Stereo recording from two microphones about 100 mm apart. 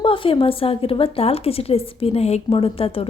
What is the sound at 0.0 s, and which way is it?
A woman's voice, 65° left (ahead or behind).